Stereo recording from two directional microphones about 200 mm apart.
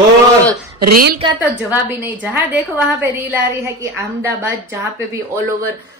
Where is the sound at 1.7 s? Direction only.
10° right (ahead or behind).